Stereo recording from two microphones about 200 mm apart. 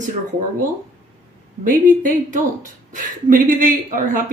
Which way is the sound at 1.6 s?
40° right (ahead or behind).